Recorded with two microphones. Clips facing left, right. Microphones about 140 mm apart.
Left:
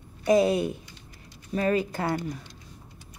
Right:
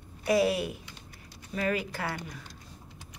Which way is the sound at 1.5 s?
35° left (ahead or behind).